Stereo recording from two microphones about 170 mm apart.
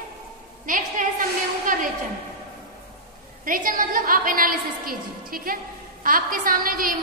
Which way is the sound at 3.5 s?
55° right (ahead or behind).